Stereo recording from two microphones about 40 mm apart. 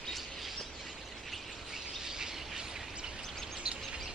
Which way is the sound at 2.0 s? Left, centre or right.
Centre.